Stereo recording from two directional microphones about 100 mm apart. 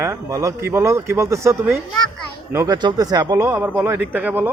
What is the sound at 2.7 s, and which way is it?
Speech, 45° right (ahead or behind).